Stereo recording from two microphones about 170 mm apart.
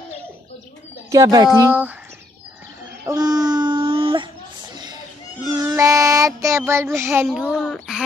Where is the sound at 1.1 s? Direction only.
20° right (ahead or behind).